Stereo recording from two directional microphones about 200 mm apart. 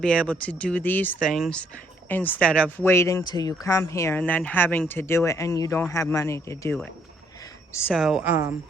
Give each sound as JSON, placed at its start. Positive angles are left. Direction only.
{"t": 0.0, "sound": "speech", "side_deg": 5}
{"t": 7.9, "sound": "a woman's voice", "side_deg": -5}